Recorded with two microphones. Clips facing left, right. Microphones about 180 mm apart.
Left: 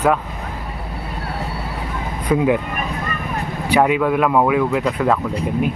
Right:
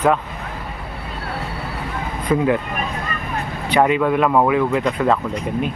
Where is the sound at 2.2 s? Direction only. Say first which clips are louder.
Left 1 dB; 10° left (ahead or behind).